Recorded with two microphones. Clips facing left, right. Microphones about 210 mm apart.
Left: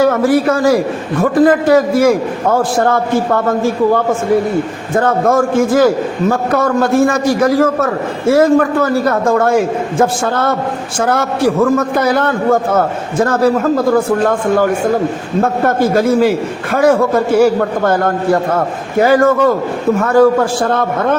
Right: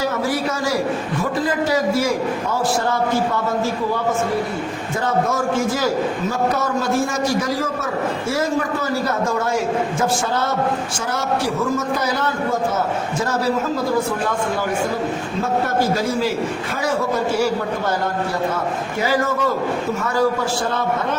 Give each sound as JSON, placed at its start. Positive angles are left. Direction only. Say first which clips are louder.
{"t": 0.0, "sound": "a man's voice", "louder": "left 10 dB", "side_deg": 55}